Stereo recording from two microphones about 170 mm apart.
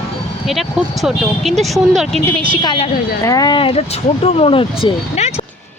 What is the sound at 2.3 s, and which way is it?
Speech, 30° right (ahead or behind).